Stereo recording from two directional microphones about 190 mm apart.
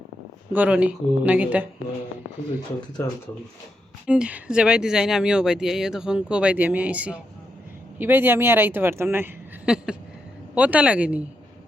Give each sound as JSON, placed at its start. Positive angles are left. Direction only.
{"t": 0.5, "sound": "speech", "side_deg": -10}
{"t": 4.0, "sound": "speech", "side_deg": -5}